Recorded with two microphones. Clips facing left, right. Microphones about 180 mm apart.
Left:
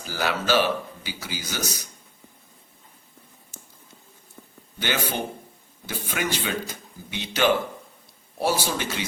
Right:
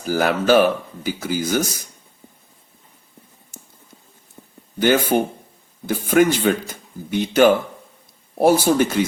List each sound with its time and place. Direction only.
0.0 s speech: 50° right (ahead or behind)
4.4 s a sound: 20° right (ahead or behind)
4.8 s speech: 45° right (ahead or behind)